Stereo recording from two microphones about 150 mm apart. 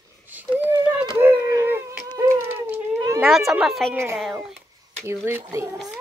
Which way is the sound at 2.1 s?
20° right (ahead or behind).